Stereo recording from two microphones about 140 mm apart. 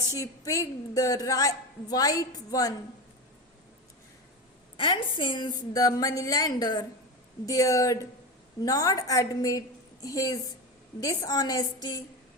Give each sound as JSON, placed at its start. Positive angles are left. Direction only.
{"t": 0.1, "sound": "a woman's voice", "side_deg": 25}
{"t": 4.8, "sound": "a woman's voice", "side_deg": 35}